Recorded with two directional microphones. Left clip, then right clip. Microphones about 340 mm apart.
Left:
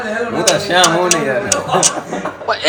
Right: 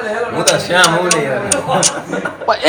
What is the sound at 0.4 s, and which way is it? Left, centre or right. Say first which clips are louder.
A woman's voice: right 1 dB; centre.